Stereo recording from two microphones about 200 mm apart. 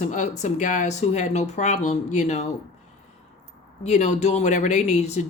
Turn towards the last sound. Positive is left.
turn(degrees=35)  # may be behind; listen again after turning